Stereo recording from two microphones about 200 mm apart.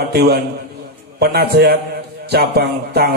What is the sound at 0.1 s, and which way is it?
A man's voice, 50° right (ahead or behind).